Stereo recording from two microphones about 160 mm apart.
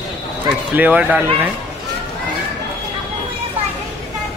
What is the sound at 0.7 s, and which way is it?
Speech, 10° right (ahead or behind).